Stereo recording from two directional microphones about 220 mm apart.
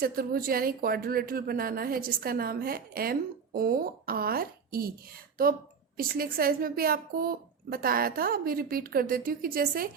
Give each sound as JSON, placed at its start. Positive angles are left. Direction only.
{"t": 0.0, "sound": "a woman's voice", "side_deg": -40}
{"t": 6.0, "sound": "a woman's voice", "side_deg": -40}